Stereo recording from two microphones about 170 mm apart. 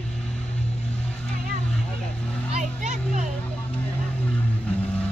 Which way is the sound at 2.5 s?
45° right (ahead or behind).